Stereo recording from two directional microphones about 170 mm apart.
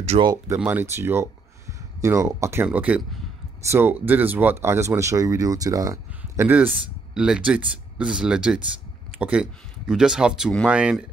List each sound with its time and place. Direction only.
0.2 s speech: 20° right (ahead or behind)
0.6 s speech: 10° right (ahead or behind)